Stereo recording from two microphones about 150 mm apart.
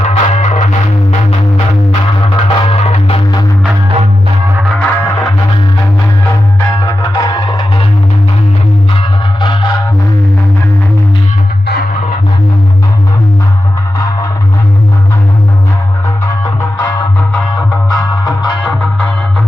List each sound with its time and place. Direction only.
0.0 s music: 45° left (ahead or behind)
1.9 s music: 35° left (ahead or behind)
4.8 s music: 15° left (ahead or behind)
6.8 s music: 25° left (ahead or behind)
9.0 s music: 30° left (ahead or behind)
11.6 s music: 90° left
16.2 s music: 20° left (ahead or behind)
18.6 s music: 5° left (ahead or behind)